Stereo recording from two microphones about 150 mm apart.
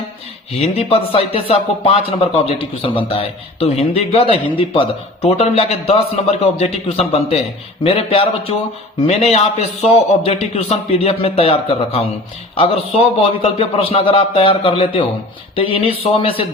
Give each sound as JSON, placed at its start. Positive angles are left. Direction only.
{"t": 0.5, "sound": "a man's voice", "side_deg": 40}